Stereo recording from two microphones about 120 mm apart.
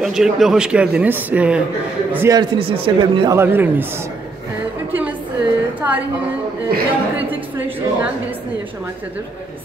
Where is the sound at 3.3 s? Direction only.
20° right (ahead or behind).